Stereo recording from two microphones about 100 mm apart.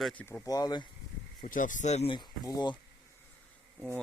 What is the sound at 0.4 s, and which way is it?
Speech, 40° left (ahead or behind).